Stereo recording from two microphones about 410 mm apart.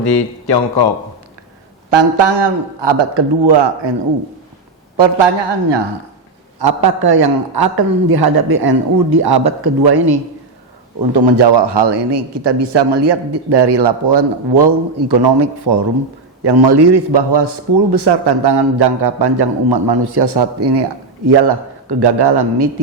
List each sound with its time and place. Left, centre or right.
0.0 s speech: left
1.9 s a man's voice: right
4.9 s a man's voice: right
6.6 s a man's voice: right